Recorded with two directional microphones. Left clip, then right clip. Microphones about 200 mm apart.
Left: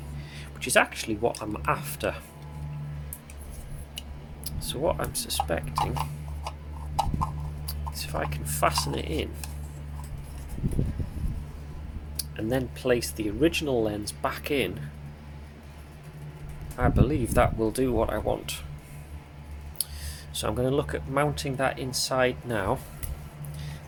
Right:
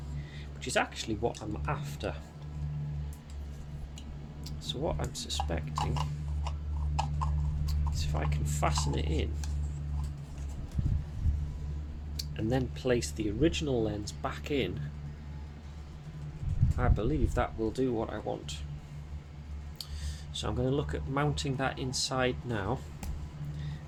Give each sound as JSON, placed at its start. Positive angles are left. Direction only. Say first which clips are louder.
{"t": 0.3, "sound": "speech", "louder": "left 8 dB", "side_deg": 20}
{"t": 4.4, "sound": "speech", "louder": "left 7 dB", "side_deg": 15}
{"t": 5.8, "sound": "a sound", "louder": "left 6 dB", "side_deg": 5}
{"t": 7.7, "sound": "speech", "louder": "left 7 dB", "side_deg": 15}
{"t": 12.1, "sound": "speech", "louder": "left 4 dB", "side_deg": 5}
{"t": 16.7, "sound": "speech", "louder": "left 7 dB", "side_deg": 10}
{"t": 20.3, "sound": "speech", "louder": "left 6 dB", "side_deg": 15}